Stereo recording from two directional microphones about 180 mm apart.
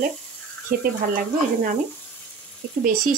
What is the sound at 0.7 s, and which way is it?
Speech, 50° right (ahead or behind).